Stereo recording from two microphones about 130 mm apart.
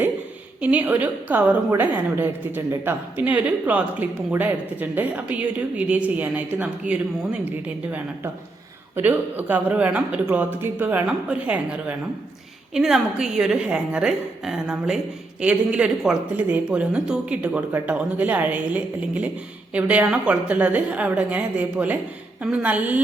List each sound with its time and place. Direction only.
0.6 s a woman's voice: 10° right (ahead or behind)